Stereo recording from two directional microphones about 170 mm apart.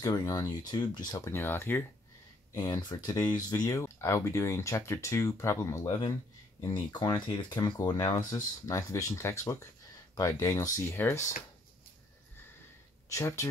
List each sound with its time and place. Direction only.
0.0 s speech: 20° left (ahead or behind)
13.1 s speech: 15° left (ahead or behind)